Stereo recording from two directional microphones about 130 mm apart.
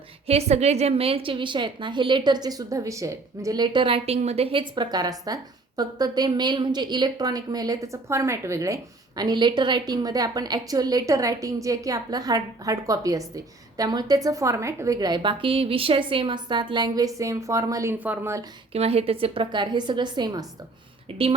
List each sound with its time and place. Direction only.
0.3 s a woman's voice: 55° right (ahead or behind); by 18.4 s 20° right (ahead or behind)
18.7 s a woman's voice: 50° right (ahead or behind); by 20.4 s 35° right (ahead or behind)
21.1 s a woman's voice: 45° right (ahead or behind)